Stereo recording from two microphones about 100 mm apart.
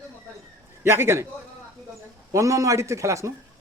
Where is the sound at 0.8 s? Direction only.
25° right (ahead or behind).